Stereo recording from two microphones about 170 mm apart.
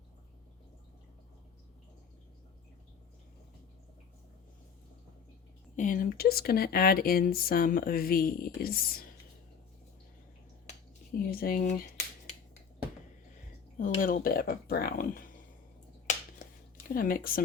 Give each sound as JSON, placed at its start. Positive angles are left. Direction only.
{"t": 5.7, "sound": "speech", "side_deg": 50}
{"t": 11.3, "sound": "speech", "side_deg": 60}
{"t": 13.7, "sound": "speech", "side_deg": 50}
{"t": 16.0, "sound": "a sound", "side_deg": 55}